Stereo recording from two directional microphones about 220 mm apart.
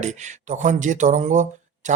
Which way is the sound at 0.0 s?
35° right (ahead or behind).